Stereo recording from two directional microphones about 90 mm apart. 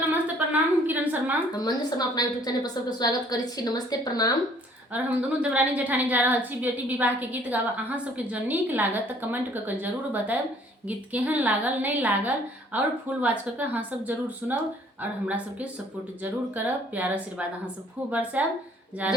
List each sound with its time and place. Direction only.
0.1 s a sound: 20° right (ahead or behind)
1.5 s a woman's voice: 50° left (ahead or behind)
4.9 s a woman's voice: 15° right (ahead or behind)